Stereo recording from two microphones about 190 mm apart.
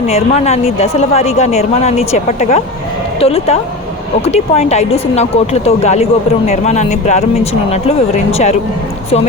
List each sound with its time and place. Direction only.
0.1 s a woman's voice: 35° left (ahead or behind)